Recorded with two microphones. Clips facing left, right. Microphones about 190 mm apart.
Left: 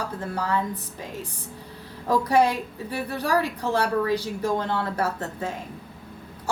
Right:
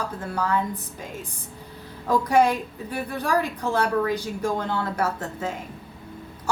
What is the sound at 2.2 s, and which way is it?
A woman's voice, 30° left (ahead or behind).